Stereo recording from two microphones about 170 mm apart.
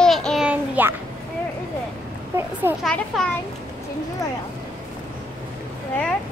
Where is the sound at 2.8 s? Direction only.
5° left (ahead or behind).